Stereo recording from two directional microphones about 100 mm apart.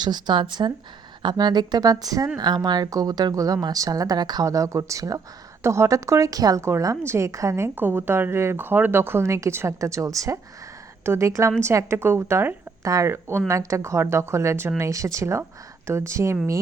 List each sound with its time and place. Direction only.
0.0 s a woman's voice: 45° right (ahead or behind); by 16.4 s 30° right (ahead or behind)